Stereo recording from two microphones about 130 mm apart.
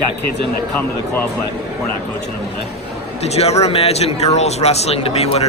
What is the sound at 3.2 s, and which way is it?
Speech, 55° left (ahead or behind).